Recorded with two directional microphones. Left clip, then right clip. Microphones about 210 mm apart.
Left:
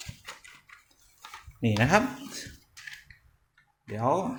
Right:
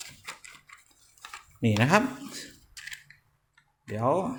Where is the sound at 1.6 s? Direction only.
10° right (ahead or behind).